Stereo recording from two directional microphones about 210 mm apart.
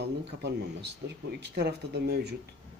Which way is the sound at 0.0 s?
55° right (ahead or behind).